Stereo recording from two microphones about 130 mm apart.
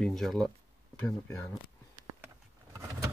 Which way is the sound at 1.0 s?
25° left (ahead or behind).